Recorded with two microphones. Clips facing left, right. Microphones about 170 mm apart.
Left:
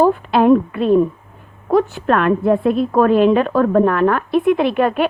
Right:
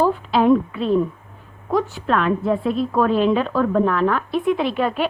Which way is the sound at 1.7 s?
55° left (ahead or behind).